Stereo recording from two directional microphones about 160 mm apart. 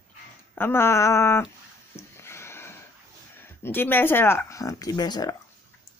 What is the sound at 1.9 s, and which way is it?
Sniff, 15° left (ahead or behind).